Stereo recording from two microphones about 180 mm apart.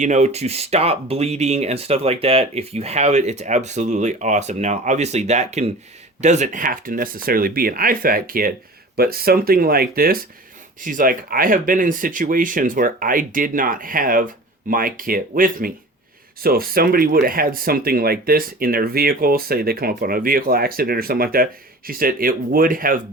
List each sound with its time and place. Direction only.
0.0 s speech: 40° right (ahead or behind)